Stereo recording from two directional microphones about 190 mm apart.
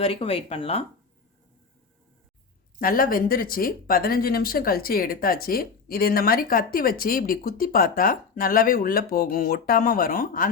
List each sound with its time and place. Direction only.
0.0 s speech: 30° left (ahead or behind)
2.8 s speech: 50° left (ahead or behind)